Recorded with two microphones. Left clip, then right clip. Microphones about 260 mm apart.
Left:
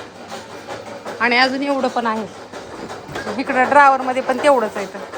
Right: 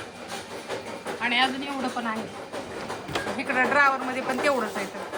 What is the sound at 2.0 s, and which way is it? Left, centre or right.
Speech, centre.